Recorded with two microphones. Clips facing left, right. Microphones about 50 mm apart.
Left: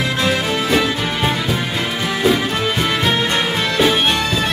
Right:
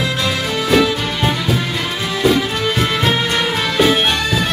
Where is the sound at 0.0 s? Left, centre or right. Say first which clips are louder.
Left 1 dB; left.